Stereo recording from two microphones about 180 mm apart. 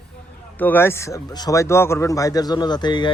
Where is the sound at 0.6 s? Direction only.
10° left (ahead or behind).